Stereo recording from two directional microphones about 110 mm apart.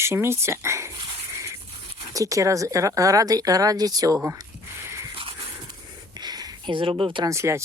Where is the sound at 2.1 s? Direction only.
30° right (ahead or behind).